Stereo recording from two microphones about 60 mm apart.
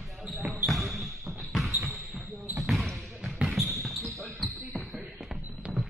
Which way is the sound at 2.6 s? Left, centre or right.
Centre.